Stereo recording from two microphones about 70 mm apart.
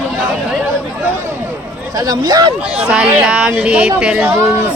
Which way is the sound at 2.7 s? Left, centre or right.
Centre.